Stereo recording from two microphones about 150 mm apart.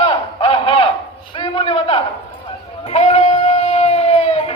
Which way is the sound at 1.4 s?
40° left (ahead or behind).